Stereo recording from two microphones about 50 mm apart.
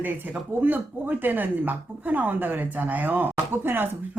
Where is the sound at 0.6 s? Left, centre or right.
Right.